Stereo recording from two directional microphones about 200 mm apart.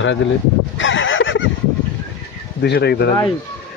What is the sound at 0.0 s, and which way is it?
Speech, 65° left (ahead or behind).